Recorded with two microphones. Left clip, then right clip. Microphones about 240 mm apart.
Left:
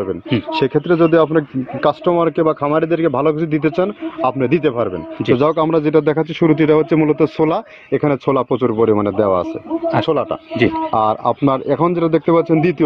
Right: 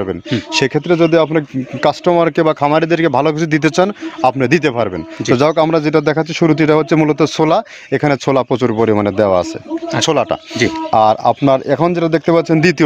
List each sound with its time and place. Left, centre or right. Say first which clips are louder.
0.5 s speech: right 2 dB; right